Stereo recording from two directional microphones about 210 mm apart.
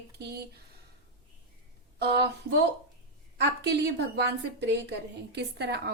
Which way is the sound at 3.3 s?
55° right (ahead or behind).